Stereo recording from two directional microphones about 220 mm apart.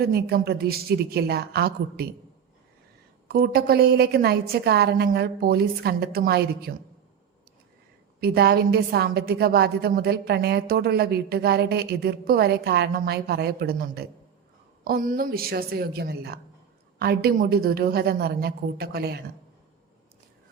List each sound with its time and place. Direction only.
0.0 s a woman's voice: 45° right (ahead or behind)
3.2 s a woman's voice: 45° right (ahead or behind)
8.2 s a woman's voice: 45° right (ahead or behind)